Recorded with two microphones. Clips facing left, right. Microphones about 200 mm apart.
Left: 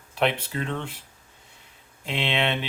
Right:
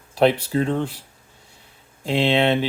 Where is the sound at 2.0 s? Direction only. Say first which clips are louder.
Right 8 dB; 35° right (ahead or behind).